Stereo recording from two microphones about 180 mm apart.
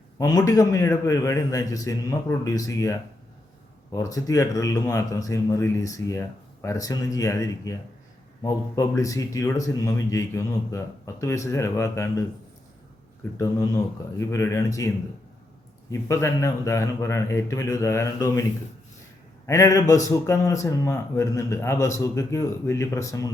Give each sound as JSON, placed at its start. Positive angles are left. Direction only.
{"t": 0.2, "sound": "speech", "side_deg": 20}
{"t": 13.3, "sound": "speech", "side_deg": 20}
{"t": 19.5, "sound": "speech", "side_deg": 15}